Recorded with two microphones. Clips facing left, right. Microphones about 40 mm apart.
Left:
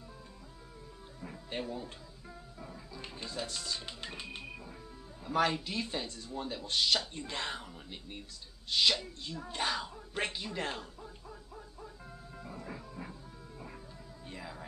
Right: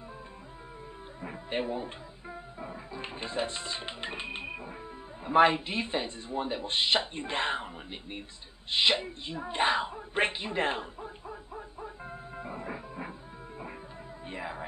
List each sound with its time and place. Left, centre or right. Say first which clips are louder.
1.2 s speech: right 7 dB; right
8.6 s a sound: right 3 dB; right
14.2 s music: right 8 dB; right